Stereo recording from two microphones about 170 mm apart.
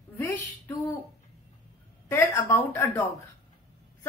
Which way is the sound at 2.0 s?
10° left (ahead or behind).